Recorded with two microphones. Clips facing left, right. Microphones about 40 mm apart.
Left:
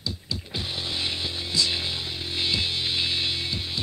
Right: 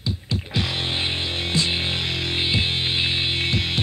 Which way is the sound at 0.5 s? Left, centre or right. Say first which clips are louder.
Right 7 dB; right.